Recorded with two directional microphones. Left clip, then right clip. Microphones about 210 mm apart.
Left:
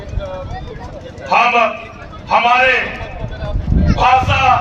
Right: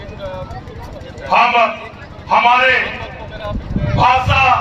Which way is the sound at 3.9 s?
10° left (ahead or behind).